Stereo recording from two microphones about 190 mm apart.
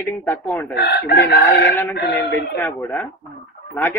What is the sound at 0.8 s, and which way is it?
A man's voice, 55° left (ahead or behind).